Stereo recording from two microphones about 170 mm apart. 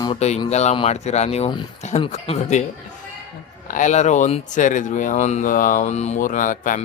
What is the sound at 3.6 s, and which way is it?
A man's voice, 50° left (ahead or behind).